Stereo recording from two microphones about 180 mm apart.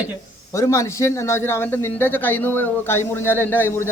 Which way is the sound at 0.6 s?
15° left (ahead or behind).